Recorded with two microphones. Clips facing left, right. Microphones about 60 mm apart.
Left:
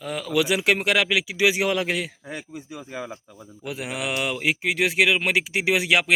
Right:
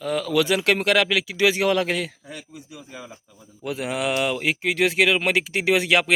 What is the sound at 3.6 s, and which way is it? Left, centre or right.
Speech, centre.